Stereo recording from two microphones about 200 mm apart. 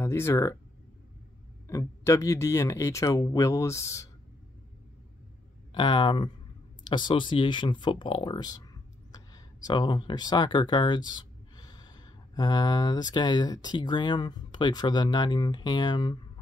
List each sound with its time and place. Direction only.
0.0 s speech: 15° left (ahead or behind)
1.7 s speech: 15° left (ahead or behind)
5.7 s speech: 25° left (ahead or behind)